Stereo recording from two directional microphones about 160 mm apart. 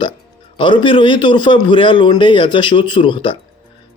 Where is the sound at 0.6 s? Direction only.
30° left (ahead or behind).